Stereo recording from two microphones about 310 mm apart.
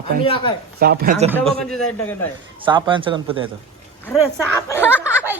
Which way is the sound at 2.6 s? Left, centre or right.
Centre.